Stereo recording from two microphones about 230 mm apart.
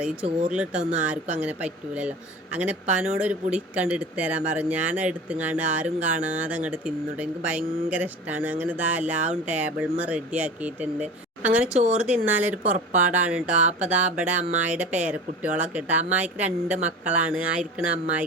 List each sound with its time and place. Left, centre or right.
0.0 s speech: centre
11.8 s speech: right
12.3 s speech: centre
12.6 s speech: right
13.0 s speech: centre